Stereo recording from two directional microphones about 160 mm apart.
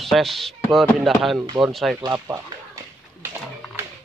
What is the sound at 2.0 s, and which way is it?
Speech, 25° right (ahead or behind).